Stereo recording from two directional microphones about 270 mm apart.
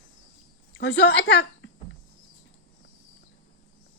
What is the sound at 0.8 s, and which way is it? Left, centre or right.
Speech, left.